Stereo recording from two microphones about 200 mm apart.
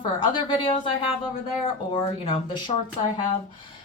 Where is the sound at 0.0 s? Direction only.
25° left (ahead or behind).